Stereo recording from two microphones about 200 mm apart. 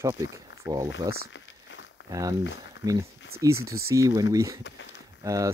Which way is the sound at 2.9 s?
15° right (ahead or behind).